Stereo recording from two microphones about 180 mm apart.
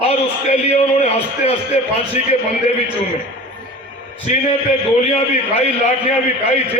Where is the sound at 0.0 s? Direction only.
35° left (ahead or behind).